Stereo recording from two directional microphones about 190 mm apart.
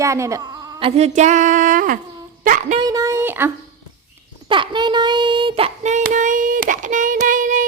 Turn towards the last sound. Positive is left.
turn(degrees=-45)  # may be behind; listen again after turning